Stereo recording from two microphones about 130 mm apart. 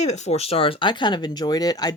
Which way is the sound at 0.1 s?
60° left (ahead or behind).